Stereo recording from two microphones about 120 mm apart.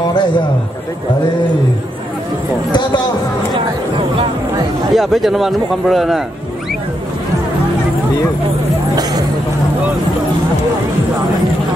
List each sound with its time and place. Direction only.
0.1 s a man's voice: 40° left (ahead or behind)
4.9 s a man's voice: centre (ahead or behind)